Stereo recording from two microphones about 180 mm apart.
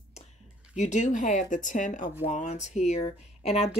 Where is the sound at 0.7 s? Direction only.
40° left (ahead or behind).